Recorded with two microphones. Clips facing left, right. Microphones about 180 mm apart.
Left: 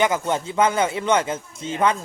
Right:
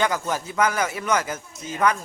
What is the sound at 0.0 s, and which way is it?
Speech, 25° left (ahead or behind).